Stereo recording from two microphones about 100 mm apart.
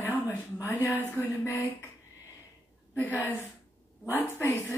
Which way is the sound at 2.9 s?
20° left (ahead or behind).